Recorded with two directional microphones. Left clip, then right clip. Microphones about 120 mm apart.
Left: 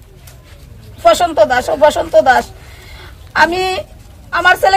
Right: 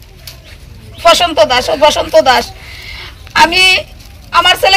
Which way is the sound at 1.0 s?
25° left (ahead or behind).